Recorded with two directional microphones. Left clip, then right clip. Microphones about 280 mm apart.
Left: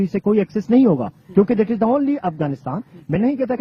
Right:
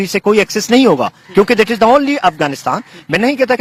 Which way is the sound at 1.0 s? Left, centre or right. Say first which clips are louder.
Right 6 dB; centre.